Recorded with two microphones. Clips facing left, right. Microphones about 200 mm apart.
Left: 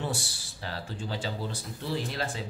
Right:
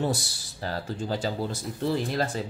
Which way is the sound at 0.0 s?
40° right (ahead or behind).